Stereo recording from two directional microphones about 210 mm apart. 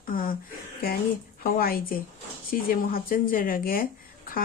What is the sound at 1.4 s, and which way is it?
Speech, 45° left (ahead or behind).